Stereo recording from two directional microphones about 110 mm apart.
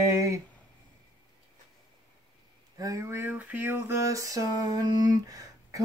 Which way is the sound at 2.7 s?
30° right (ahead or behind).